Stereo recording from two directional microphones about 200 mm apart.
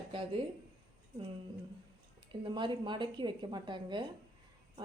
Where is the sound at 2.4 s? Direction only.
25° right (ahead or behind).